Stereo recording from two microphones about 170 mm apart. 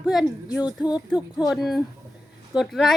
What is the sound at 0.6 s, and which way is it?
Speech, 25° left (ahead or behind).